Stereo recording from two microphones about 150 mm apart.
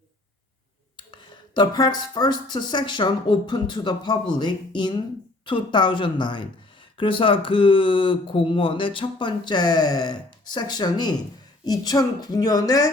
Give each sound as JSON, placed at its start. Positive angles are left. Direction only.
{"t": 1.1, "sound": "speech", "side_deg": 30}